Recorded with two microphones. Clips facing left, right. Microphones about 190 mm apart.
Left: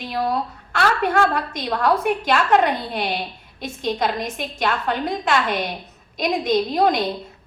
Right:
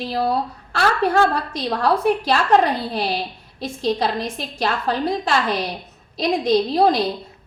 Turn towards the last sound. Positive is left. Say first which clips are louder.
# right 2 dB
turn(degrees=-30)  # may be behind; listen again after turning